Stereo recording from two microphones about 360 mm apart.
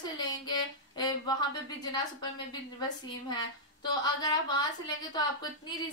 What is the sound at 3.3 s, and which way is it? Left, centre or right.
A woman's voice, centre.